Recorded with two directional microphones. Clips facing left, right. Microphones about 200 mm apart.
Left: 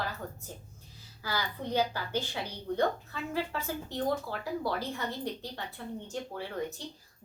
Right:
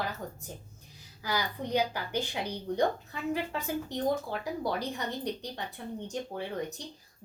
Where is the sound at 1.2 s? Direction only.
15° right (ahead or behind).